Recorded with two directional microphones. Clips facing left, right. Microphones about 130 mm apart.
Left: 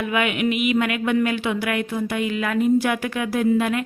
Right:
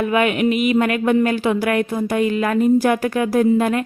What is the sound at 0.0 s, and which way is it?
Music, 40° right (ahead or behind).